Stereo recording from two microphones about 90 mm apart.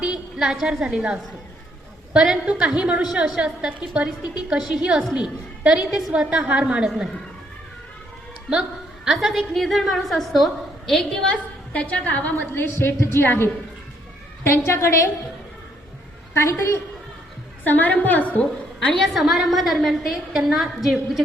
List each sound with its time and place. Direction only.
0.0 s a woman's voice: 10° right (ahead or behind)
9.0 s a woman's voice: centre (ahead or behind); by 15.1 s 30° left (ahead or behind)
16.3 s a woman's voice: 30° left (ahead or behind)
17.6 s a woman's voice: 20° left (ahead or behind)
18.9 s a woman's voice: centre (ahead or behind)